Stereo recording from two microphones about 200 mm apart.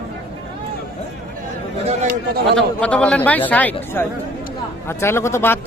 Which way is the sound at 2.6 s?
5° left (ahead or behind).